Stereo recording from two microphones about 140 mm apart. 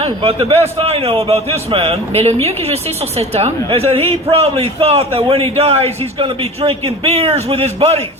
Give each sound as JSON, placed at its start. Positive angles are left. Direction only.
{"t": 0.0, "sound": "a man's voice", "side_deg": -45}